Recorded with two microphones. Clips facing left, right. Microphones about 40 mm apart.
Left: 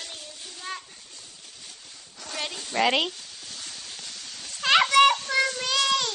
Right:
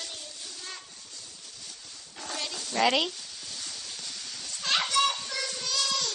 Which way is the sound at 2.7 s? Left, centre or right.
Centre.